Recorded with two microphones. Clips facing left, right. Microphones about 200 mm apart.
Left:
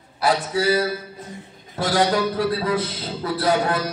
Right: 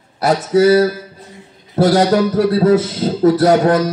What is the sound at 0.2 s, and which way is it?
A man's voice, 40° right (ahead or behind).